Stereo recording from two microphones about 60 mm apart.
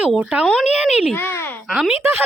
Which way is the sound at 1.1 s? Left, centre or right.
Left.